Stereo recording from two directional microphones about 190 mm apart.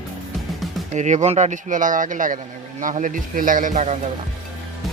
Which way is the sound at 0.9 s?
40° right (ahead or behind).